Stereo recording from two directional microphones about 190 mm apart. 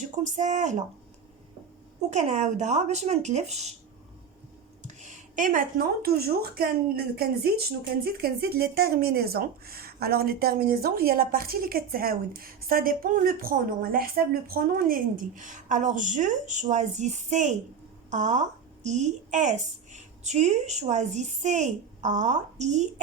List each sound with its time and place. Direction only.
0.3 s a woman's voice: 40° right (ahead or behind)
2.0 s a woman's voice: 35° right (ahead or behind)
4.8 s a woman's voice: 40° right (ahead or behind)